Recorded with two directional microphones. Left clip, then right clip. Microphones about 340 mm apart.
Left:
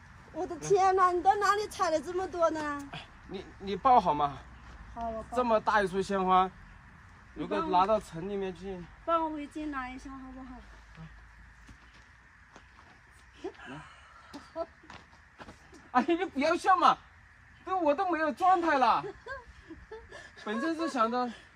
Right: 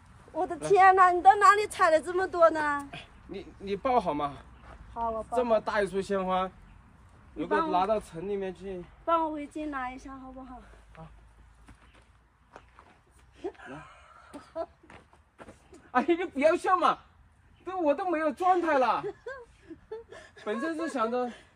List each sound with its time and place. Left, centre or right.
0.6 s a woman's voice: centre
2.9 s speech: centre
5.0 s a woman's voice: centre
5.3 s speech: centre
11.0 s a woman's voice: centre
13.4 s a sound: centre
14.9 s a sound: centre
15.9 s speech: centre